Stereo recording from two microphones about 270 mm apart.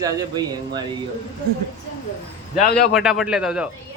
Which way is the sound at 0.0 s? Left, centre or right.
Centre.